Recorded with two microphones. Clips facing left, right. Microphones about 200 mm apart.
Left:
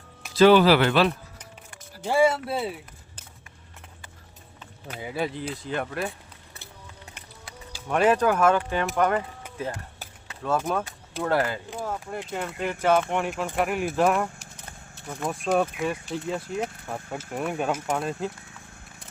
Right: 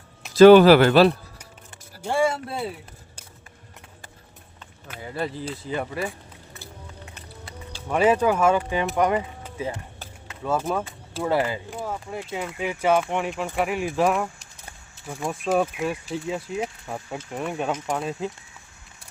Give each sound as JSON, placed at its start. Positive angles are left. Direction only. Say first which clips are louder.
{"t": 0.3, "sound": "speech", "louder": "right 6 dB", "side_deg": -45}
{"t": 2.0, "sound": "speech", "louder": "left 2 dB", "side_deg": 5}
{"t": 4.9, "sound": "speech", "louder": "even", "side_deg": 10}
{"t": 5.5, "sound": "speech", "louder": "right 1 dB", "side_deg": -5}
{"t": 7.4, "sound": "speech", "louder": "right 1 dB", "side_deg": -5}
{"t": 11.2, "sound": "speech", "louder": "right 1 dB", "side_deg": -10}